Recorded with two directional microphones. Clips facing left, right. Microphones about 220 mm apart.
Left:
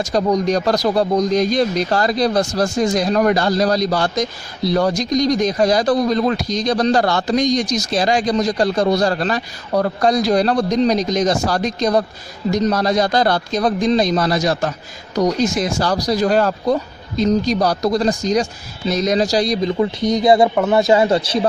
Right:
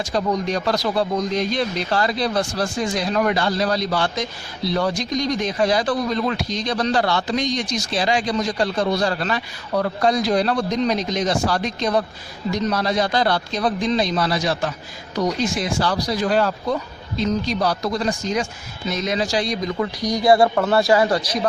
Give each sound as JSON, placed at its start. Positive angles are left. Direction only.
{"t": 0.0, "sound": "a man's voice", "side_deg": 40}
{"t": 19.8, "sound": "a man's voice", "side_deg": 25}